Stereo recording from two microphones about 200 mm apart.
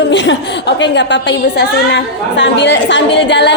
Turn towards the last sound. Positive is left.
turn(degrees=60)  # may be behind; listen again after turning